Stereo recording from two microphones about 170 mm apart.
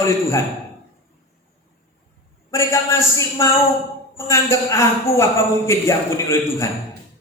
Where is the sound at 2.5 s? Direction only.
15° left (ahead or behind).